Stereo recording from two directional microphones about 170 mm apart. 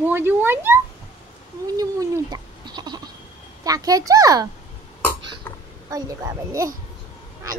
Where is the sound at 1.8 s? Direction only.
20° right (ahead or behind).